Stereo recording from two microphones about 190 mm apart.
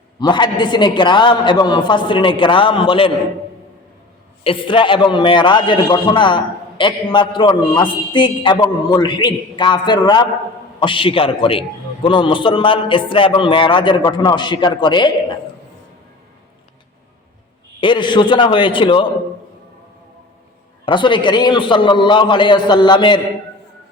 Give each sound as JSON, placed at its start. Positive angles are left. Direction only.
{"t": 0.2, "sound": "a man's voice", "side_deg": 25}
{"t": 4.4, "sound": "a man's voice", "side_deg": 25}
{"t": 17.7, "sound": "a man's voice", "side_deg": 25}
{"t": 20.8, "sound": "a man's voice", "side_deg": 25}